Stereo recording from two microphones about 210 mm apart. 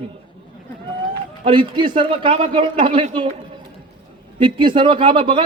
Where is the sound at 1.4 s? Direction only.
25° right (ahead or behind).